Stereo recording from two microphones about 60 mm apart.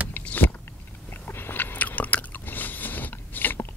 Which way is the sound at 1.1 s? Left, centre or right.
Left.